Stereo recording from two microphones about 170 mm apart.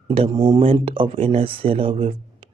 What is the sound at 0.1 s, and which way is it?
Speech, 30° right (ahead or behind).